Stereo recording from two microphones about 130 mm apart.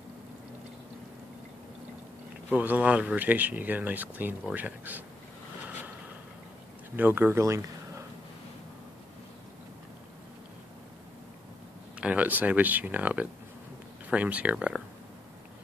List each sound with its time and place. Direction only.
2.5 s speech: 10° right (ahead or behind)
7.0 s speech: 15° right (ahead or behind)
12.0 s speech: 10° right (ahead or behind)